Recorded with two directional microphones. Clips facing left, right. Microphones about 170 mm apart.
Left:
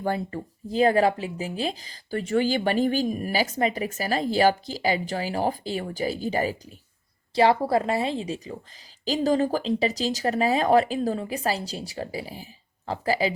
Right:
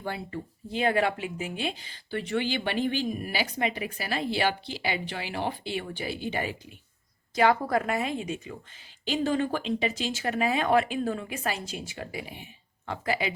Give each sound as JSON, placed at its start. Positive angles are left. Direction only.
{"t": 0.0, "sound": "speech", "side_deg": 45}